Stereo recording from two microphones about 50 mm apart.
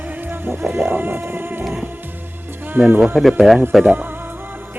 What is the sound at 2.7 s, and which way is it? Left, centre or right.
Speech, right.